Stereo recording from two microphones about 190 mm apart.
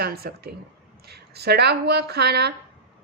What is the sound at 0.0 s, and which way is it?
A woman's voice, 55° right (ahead or behind).